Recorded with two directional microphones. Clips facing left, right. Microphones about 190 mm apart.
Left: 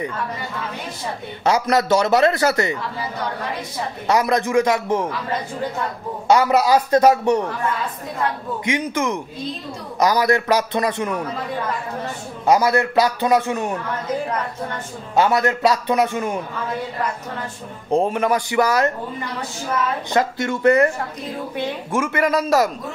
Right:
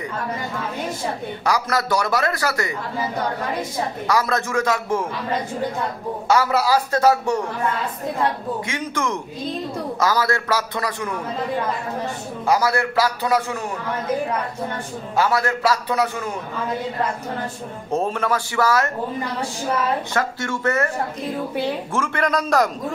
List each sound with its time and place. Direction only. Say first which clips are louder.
1.4 s a man's voice: left 5 dB; 20° left (ahead or behind)
4.1 s a man's voice: left 5 dB; 20° left (ahead or behind)
6.2 s a man's voice: left 3 dB; 20° left (ahead or behind)
8.6 s a man's voice: left 8 dB; 15° left (ahead or behind)
12.4 s a man's voice: left 3 dB; 20° left (ahead or behind)
15.1 s a man's voice: left 3 dB; 20° left (ahead or behind)
17.9 s a man's voice: left 4 dB; 15° left (ahead or behind)
20.1 s a man's voice: left 4 dB; 20° left (ahead or behind)
21.9 s a man's voice: left 5 dB; 10° left (ahead or behind)